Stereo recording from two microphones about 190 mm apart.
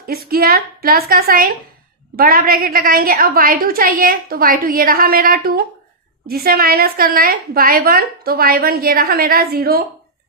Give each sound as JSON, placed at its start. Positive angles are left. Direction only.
{"t": 0.1, "sound": "a woman's voice", "side_deg": -50}